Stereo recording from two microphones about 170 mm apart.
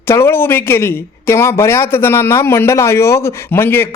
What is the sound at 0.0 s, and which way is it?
A man's voice, 15° left (ahead or behind).